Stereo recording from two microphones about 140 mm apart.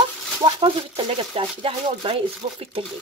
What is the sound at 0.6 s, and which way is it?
Speech, 40° right (ahead or behind).